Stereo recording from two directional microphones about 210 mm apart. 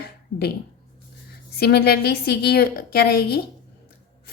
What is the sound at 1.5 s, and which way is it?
A woman's voice, 50° left (ahead or behind).